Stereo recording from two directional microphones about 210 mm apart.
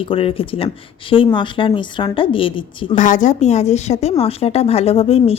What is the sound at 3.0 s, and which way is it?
A woman's voice, 35° left (ahead or behind).